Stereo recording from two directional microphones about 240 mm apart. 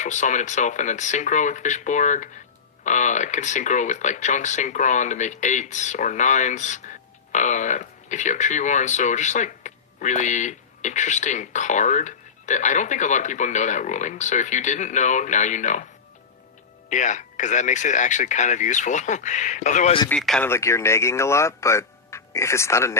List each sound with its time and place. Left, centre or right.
0.0 s speech: left
16.9 s speech: left
20.1 s speech: centre